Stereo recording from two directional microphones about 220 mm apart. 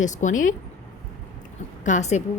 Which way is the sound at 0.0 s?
35° left (ahead or behind).